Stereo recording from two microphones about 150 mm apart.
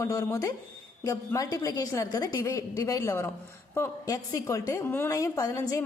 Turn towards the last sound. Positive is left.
turn(degrees=20)  # may be behind; listen again after turning